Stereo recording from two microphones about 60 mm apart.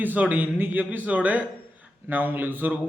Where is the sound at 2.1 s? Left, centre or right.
Right.